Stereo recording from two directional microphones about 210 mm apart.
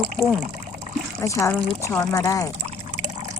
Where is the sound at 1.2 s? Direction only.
15° left (ahead or behind).